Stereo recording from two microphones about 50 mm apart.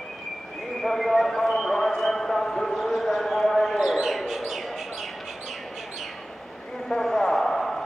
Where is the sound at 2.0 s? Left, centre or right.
Centre.